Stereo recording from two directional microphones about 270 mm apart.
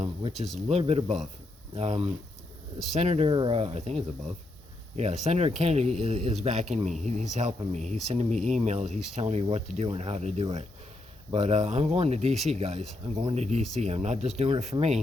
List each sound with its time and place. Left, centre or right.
0.0 s speech: centre
5.2 s speech: right